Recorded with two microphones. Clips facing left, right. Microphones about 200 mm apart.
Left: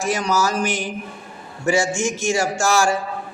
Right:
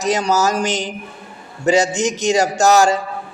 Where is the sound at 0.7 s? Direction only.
20° right (ahead or behind).